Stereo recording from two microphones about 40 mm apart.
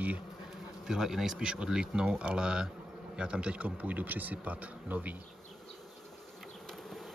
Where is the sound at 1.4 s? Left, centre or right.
Right.